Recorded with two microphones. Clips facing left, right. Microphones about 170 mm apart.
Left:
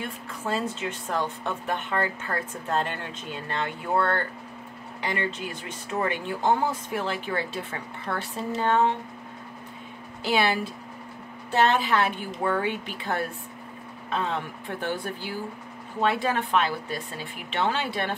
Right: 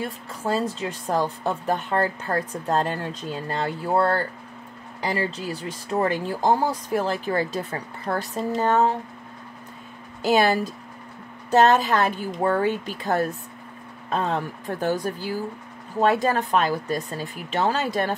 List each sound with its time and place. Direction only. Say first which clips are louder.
0.0 s speech: right 4 dB; 40° right (ahead or behind)
10.2 s speech: right 5 dB; 45° right (ahead or behind)